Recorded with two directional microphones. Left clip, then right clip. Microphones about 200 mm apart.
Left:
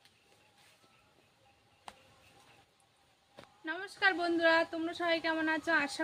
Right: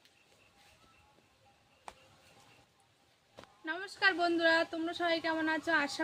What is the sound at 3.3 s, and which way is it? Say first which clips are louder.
A man's voice: even; centre (ahead or behind).